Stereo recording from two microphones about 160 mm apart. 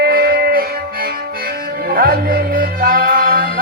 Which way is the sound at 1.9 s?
65° right (ahead or behind).